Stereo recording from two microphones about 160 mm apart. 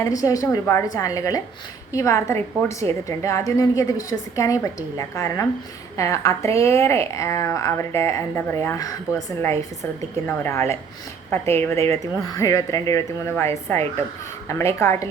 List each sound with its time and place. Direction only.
0.2 s a woman's voice: 20° left (ahead or behind)